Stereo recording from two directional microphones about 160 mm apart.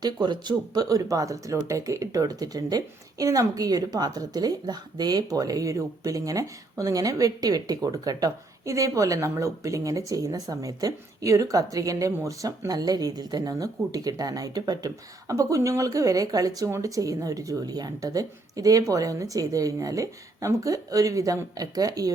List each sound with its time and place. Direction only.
0.0 s a woman's voice: 25° right (ahead or behind)